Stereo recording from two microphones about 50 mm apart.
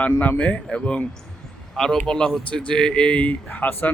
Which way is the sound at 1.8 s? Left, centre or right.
Centre.